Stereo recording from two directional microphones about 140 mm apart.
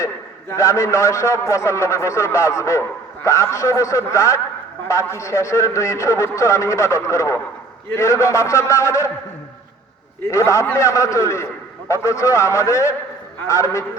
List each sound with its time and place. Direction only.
0.5 s a man's voice: 20° left (ahead or behind)
10.3 s a man's voice: 20° left (ahead or behind)